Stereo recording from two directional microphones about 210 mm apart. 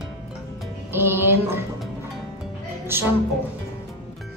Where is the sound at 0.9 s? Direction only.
10° right (ahead or behind).